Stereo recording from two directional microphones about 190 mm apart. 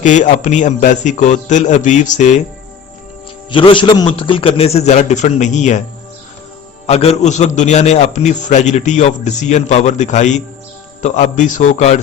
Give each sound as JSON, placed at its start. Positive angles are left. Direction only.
{"t": 0.0, "sound": "a man's voice", "side_deg": 40}
{"t": 3.5, "sound": "a man's voice", "side_deg": 25}
{"t": 6.8, "sound": "a man's voice", "side_deg": 35}